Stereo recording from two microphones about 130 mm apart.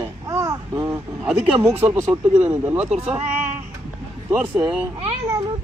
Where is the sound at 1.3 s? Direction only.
10° right (ahead or behind).